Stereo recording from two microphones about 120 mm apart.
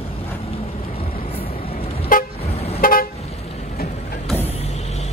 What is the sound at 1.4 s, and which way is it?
Vehicle, 50° left (ahead or behind).